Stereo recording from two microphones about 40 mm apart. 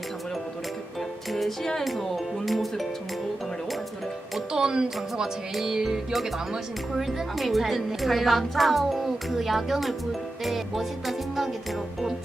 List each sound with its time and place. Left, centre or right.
1.3 s music: centre
4.5 s a woman's voice: centre
5.5 s music: centre
6.9 s a woman's voice: centre